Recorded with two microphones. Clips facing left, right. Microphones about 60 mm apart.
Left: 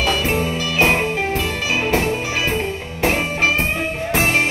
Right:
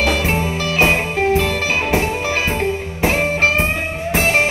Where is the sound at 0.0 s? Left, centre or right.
Right.